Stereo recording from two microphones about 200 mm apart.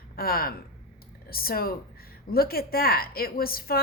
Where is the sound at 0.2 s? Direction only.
50° left (ahead or behind).